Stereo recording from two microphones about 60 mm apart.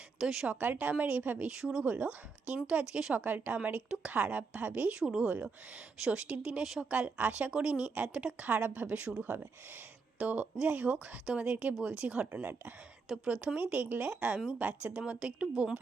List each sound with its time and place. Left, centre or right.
0.2 s a woman's voice: centre
0.4 s speech: right
1.5 s a woman's voice: centre
1.8 s a woman's voice: right
3.2 s speech: right
3.8 s a woman's voice: centre
4.9 s a woman's voice: centre
6.6 s a woman's voice: centre
8.4 s speech: right
12.3 s speech: right
13.2 s speech: centre